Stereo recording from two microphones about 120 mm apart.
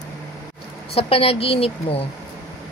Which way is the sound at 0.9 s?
50° left (ahead or behind).